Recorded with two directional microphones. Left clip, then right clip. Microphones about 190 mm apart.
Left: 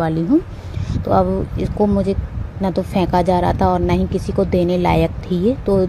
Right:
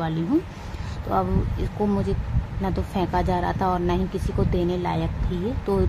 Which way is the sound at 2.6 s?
25° left (ahead or behind).